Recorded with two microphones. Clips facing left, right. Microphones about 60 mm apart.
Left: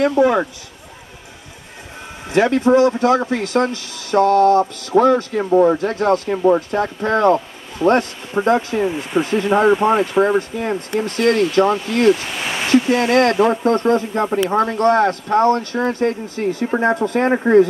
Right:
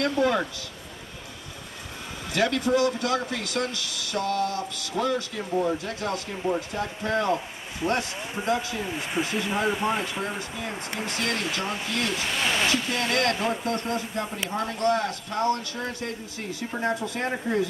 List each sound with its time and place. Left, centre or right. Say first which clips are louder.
0.2 s speech: left 8 dB; left
2.2 s speech: left 10 dB; left
5.4 s speech: left 13 dB; left
5.8 s speech: left 13 dB; left
10.1 s speech: left 15 dB; left
12.4 s a sound: left 2 dB; centre
12.6 s speech: left 11 dB; left